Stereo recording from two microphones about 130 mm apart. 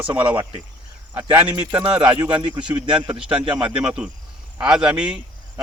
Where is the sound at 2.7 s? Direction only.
10° right (ahead or behind).